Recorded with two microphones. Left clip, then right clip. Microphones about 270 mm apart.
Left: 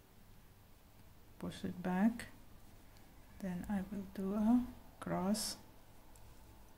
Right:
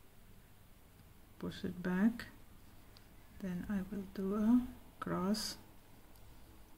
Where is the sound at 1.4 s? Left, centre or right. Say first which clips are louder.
Right 1 dB; centre.